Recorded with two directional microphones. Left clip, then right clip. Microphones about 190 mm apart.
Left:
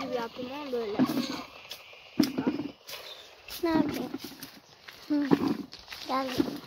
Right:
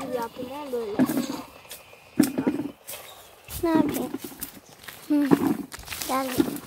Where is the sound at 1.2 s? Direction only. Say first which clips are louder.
Right 2 dB; 35° left (ahead or behind).